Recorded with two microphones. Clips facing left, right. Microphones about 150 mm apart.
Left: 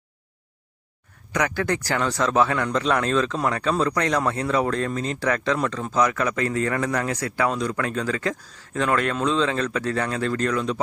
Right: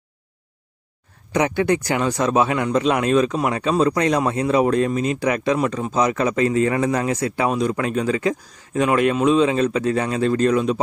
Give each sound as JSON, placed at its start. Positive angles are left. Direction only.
{"t": 1.3, "sound": "speech", "side_deg": -25}